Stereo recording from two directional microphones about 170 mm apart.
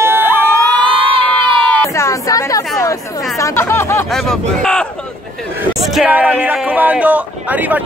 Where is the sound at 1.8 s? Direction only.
15° left (ahead or behind).